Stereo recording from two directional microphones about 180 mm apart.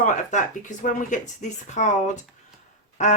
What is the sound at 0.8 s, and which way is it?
Speech, 45° left (ahead or behind).